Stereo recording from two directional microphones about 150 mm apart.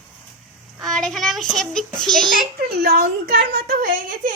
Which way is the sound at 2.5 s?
85° right.